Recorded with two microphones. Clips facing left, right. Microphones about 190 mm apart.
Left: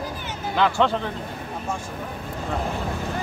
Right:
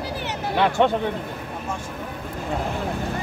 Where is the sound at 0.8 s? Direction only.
15° right (ahead or behind).